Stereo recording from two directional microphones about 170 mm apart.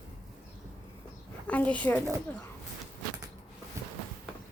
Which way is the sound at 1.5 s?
10° left (ahead or behind).